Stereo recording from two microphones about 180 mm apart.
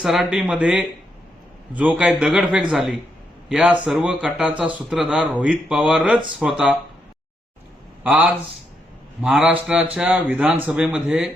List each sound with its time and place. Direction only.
0.0 s speech: centre (ahead or behind)
8.0 s a man's voice: 10° right (ahead or behind)